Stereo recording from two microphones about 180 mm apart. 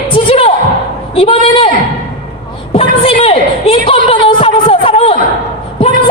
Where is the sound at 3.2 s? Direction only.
30° left (ahead or behind).